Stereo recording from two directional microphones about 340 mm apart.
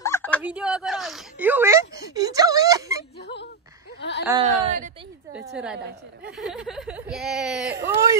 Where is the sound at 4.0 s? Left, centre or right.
Left.